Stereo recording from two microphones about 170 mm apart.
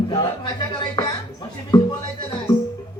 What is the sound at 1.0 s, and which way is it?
Music, 25° left (ahead or behind).